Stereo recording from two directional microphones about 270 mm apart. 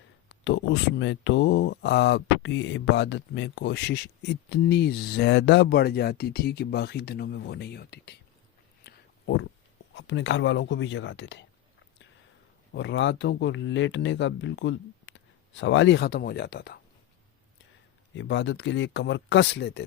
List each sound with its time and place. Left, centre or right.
0.4 s speech: left
8.8 s a sound: left
9.9 s speech: left
12.7 s speech: left
18.2 s speech: left